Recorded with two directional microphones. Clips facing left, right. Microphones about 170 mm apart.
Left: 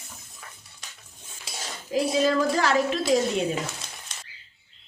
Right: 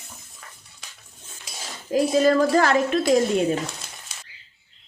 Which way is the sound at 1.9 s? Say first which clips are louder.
Right 4 dB; 50° right (ahead or behind).